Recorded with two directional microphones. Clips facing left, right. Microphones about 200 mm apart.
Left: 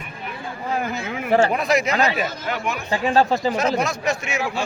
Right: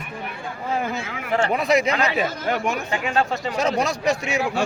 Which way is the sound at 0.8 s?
25° right (ahead or behind).